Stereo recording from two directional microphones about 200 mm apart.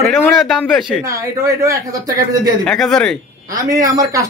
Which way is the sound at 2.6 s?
Centre (ahead or behind).